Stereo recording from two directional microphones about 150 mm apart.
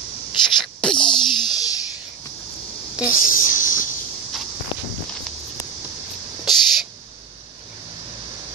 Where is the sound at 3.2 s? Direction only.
65° left (ahead or behind).